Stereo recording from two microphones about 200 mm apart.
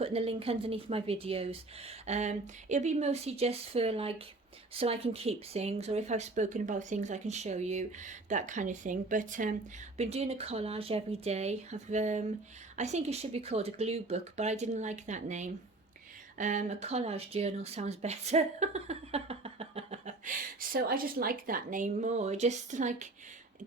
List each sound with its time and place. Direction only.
0.0 s speech: 30° right (ahead or behind)